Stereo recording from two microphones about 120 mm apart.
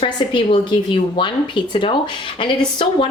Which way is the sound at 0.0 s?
45° left (ahead or behind).